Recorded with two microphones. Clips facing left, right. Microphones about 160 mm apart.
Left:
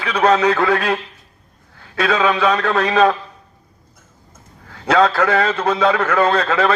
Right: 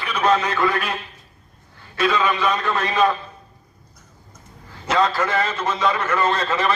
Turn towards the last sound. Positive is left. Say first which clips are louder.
# left 5 dB
turn(degrees=65)  # may be behind; listen again after turning